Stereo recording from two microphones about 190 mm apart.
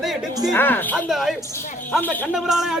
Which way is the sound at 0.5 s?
10° left (ahead or behind).